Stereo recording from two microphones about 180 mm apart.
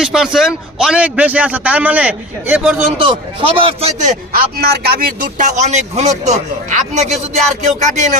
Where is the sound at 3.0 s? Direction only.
30° right (ahead or behind).